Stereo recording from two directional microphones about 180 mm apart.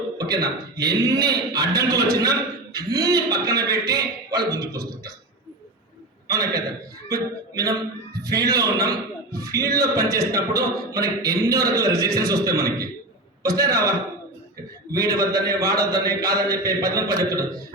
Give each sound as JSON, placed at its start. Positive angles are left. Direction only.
{"t": 0.2, "sound": "a man's voice", "side_deg": -20}
{"t": 6.2, "sound": "a man's voice", "side_deg": -20}
{"t": 14.9, "sound": "a man's voice", "side_deg": -20}